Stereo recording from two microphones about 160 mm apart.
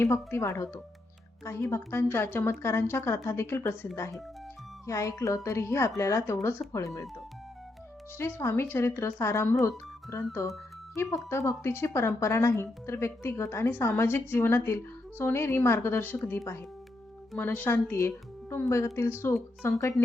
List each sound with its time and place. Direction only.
0.0 s speech: 15° left (ahead or behind)
4.9 s speech: 20° left (ahead or behind)
8.2 s speech: 15° left (ahead or behind)
19.6 s speech: 15° left (ahead or behind)